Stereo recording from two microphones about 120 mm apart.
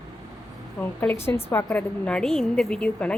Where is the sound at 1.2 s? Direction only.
20° left (ahead or behind).